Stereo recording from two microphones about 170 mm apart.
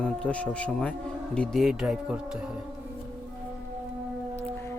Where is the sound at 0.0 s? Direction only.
5° left (ahead or behind).